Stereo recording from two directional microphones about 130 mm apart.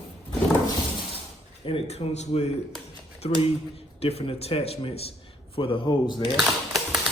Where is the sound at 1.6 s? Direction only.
50° left (ahead or behind).